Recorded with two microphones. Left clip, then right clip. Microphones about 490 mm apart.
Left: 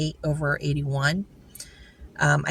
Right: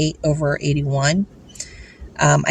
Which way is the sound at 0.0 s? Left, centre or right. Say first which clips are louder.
Right 8 dB; left.